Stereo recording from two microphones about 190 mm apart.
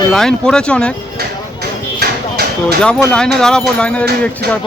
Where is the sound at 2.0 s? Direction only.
60° right (ahead or behind).